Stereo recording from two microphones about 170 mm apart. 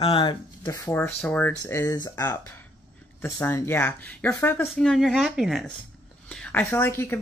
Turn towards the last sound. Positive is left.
turn(degrees=15)  # may be behind; listen again after turning